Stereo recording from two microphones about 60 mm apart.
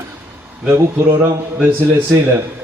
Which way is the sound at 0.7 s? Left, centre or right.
Right.